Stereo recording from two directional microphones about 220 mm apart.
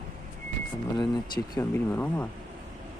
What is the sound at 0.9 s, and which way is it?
Speech, 20° left (ahead or behind).